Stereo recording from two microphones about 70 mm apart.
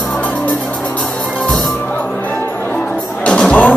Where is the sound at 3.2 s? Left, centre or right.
Centre.